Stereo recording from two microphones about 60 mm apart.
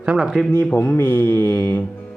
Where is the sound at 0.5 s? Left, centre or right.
Left.